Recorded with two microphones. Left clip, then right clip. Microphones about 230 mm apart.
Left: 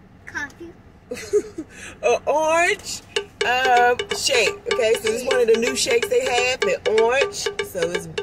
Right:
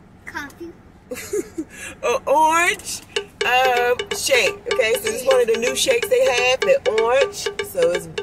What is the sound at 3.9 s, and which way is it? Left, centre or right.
Music, centre.